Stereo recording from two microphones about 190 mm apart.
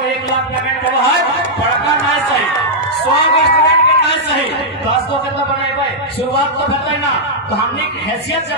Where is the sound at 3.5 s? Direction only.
60° left (ahead or behind).